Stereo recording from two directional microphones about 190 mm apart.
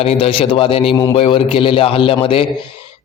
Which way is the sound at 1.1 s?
30° left (ahead or behind).